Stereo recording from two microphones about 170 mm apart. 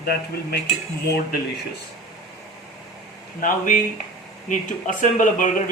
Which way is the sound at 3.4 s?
50° left (ahead or behind).